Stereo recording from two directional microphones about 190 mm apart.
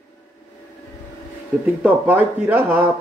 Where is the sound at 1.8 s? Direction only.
10° right (ahead or behind).